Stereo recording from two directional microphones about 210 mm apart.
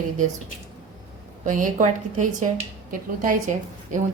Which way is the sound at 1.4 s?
40° right (ahead or behind).